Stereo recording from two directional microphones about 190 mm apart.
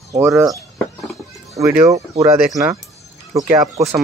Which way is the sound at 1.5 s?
15° right (ahead or behind).